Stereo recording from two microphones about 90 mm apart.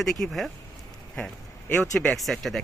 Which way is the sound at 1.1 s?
10° left (ahead or behind).